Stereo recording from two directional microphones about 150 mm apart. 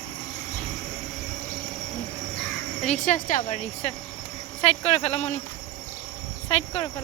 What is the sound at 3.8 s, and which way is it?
Speech, 45° left (ahead or behind).